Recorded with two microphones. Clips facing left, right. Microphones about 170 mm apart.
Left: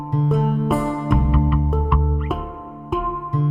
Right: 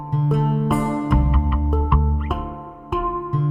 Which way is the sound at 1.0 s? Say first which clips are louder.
Left 2 dB; centre (ahead or behind).